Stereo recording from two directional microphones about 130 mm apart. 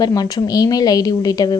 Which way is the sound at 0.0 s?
30° left (ahead or behind).